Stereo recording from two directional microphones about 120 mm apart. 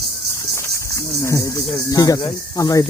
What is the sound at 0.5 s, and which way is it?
Speech, 25° left (ahead or behind).